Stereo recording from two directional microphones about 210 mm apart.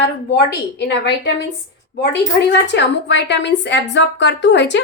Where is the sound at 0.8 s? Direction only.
55° left (ahead or behind).